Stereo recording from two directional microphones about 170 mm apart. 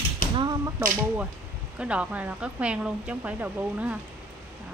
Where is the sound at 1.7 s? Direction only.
5° right (ahead or behind).